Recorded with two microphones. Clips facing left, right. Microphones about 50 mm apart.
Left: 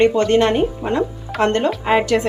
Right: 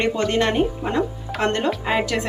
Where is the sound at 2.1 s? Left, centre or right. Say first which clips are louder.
Left 5 dB; centre.